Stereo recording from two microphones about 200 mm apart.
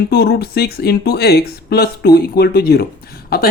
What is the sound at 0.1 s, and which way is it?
Speech, 55° left (ahead or behind).